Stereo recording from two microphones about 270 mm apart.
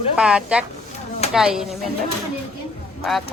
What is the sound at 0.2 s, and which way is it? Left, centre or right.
Speech, centre.